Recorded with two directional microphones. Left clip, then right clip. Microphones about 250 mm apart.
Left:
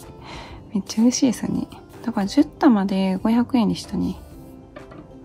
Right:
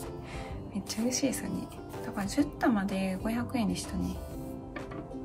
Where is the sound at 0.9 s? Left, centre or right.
Centre.